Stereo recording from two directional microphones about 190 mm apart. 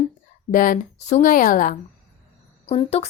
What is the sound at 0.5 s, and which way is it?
Speech, 45° left (ahead or behind).